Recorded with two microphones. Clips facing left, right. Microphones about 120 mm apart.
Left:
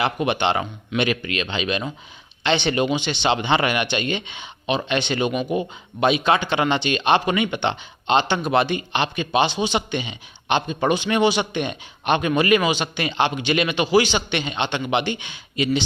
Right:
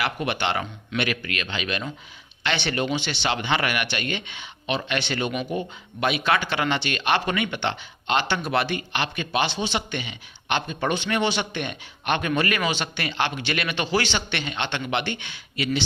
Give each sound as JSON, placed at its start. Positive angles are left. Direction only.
{"t": 0.0, "sound": "speech", "side_deg": 20}